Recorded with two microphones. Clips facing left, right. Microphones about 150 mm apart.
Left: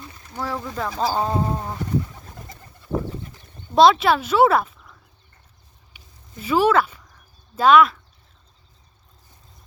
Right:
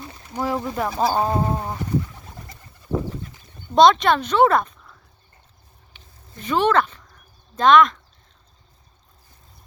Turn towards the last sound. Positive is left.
turn(degrees=5)  # may be behind; listen again after turning